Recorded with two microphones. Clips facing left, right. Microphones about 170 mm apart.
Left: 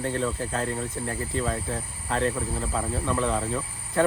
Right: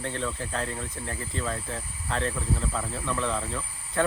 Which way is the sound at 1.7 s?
40° left (ahead or behind).